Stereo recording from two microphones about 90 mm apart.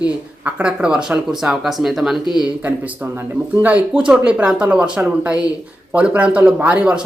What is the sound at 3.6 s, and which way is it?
Speech, 15° right (ahead or behind).